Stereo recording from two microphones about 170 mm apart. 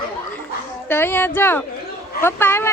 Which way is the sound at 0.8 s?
15° left (ahead or behind).